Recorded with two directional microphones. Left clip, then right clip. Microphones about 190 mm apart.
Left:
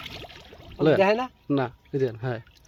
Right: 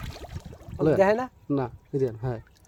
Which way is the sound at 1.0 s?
20° right (ahead or behind).